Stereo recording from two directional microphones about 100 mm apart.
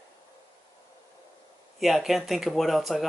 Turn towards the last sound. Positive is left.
turn(degrees=0)  # may be behind; listen again after turning